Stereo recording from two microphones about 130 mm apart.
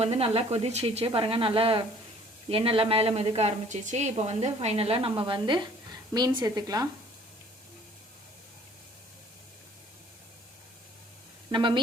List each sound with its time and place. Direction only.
0.0 s a woman's voice: 50° right (ahead or behind); by 6.8 s 30° right (ahead or behind)
11.5 s a woman's voice: 40° right (ahead or behind)